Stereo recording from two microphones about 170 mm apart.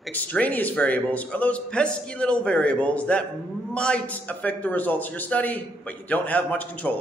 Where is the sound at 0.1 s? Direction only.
10° left (ahead or behind).